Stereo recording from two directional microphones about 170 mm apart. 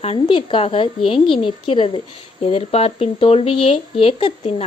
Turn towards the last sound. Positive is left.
turn(degrees=35)  # may be behind; listen again after turning